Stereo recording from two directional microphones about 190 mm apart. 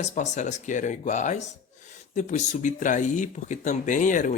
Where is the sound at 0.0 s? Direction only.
40° left (ahead or behind).